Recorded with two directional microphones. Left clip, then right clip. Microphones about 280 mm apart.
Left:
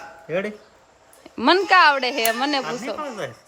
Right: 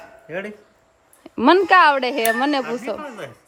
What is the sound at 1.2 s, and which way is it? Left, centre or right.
Speech, centre.